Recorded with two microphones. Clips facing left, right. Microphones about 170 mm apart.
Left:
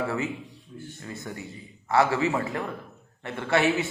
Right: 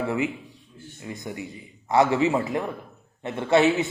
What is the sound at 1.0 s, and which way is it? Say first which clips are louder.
A man's voice: right 5 dB; 15° right (ahead or behind).